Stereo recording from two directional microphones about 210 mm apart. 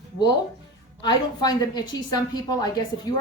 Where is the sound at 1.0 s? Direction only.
20° left (ahead or behind).